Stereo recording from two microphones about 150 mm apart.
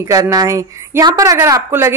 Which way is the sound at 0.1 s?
25° right (ahead or behind).